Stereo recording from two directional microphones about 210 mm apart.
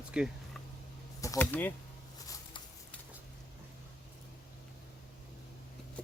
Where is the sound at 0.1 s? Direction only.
5° right (ahead or behind).